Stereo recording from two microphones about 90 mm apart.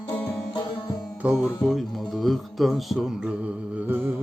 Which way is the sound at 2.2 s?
Centre (ahead or behind).